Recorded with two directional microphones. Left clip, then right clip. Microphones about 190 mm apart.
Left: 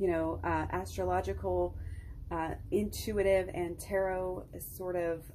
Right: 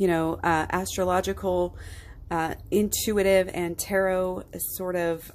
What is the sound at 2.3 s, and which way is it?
Speech, 40° right (ahead or behind).